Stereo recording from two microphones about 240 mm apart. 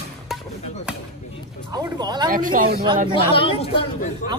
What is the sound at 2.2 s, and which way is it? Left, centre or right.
Speech, right.